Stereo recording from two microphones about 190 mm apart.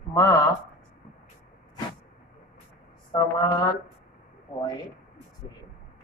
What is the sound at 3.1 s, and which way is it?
Speech, 20° left (ahead or behind).